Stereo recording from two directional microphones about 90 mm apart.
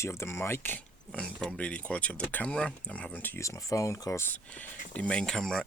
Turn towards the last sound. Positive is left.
turn(degrees=5)  # may be behind; listen again after turning